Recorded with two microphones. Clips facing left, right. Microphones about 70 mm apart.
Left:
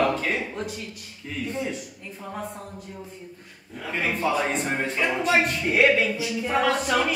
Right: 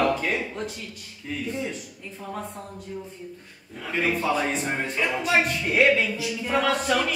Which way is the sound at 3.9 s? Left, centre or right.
Centre.